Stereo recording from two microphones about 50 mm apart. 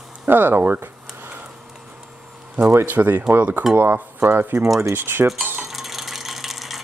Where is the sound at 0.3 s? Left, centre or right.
Right.